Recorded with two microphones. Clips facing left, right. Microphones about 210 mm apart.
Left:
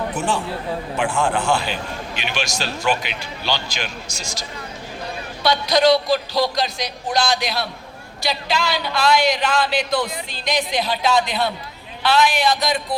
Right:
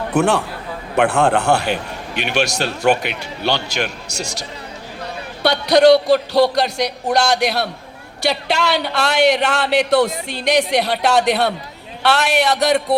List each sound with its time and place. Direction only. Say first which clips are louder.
0.1 s a man's voice: right 6 dB; 65° right (ahead or behind)